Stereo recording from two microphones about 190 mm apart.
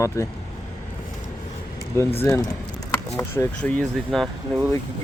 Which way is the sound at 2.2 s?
15° left (ahead or behind).